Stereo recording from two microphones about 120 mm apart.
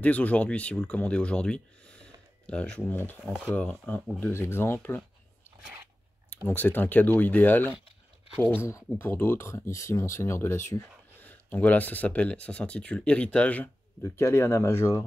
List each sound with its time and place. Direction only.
0.0 s speech: 10° left (ahead or behind)
6.3 s speech: 15° left (ahead or behind)
14.0 s speech: 20° left (ahead or behind)